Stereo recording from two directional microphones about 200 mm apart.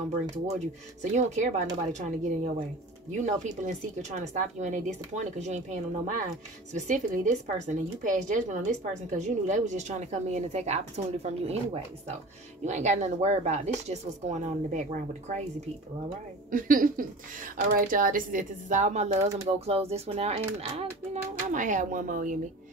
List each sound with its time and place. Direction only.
1.1 s a woman's voice: 35° right (ahead or behind)
16.4 s a woman's voice: 45° right (ahead or behind)